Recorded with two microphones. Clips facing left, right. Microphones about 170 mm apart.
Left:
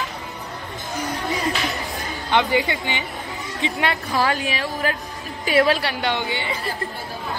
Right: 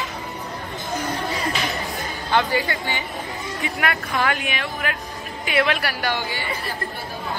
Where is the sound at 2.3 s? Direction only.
20° left (ahead or behind).